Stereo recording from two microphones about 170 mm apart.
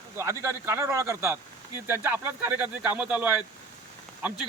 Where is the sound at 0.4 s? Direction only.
15° right (ahead or behind).